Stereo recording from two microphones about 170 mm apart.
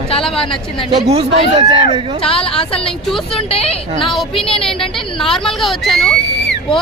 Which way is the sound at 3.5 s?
35° left (ahead or behind).